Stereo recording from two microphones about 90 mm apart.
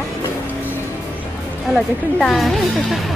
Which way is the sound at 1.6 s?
Centre (ahead or behind).